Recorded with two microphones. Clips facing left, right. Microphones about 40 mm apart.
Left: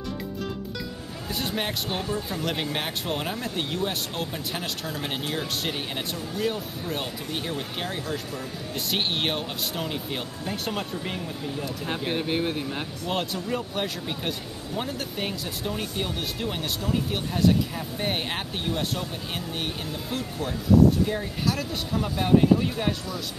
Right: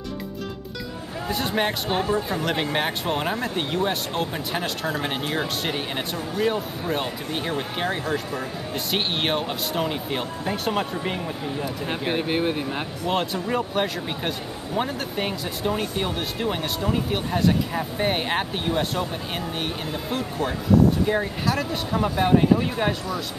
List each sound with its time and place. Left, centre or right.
1.6 s speech: centre
8.9 s speech: centre
21.9 s speech: centre